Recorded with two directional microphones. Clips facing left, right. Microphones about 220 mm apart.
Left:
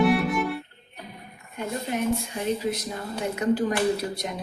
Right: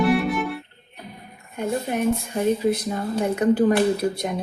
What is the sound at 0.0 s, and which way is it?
Music, centre (ahead or behind).